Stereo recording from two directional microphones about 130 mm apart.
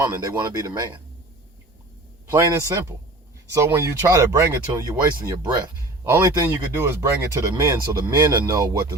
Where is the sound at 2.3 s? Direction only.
20° right (ahead or behind).